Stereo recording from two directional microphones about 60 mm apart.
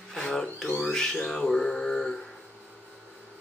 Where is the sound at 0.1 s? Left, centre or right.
Centre.